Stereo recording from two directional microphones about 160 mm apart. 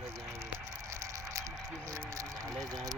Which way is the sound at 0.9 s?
20° right (ahead or behind).